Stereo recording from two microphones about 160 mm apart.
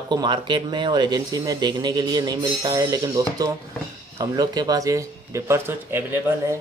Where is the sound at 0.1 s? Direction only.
30° right (ahead or behind).